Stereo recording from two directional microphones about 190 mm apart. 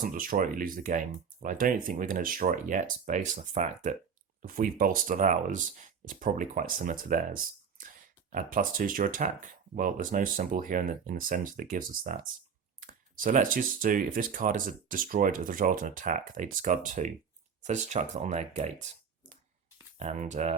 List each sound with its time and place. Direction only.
0.0 s speech: 50° right (ahead or behind)
20.0 s speech: 40° right (ahead or behind)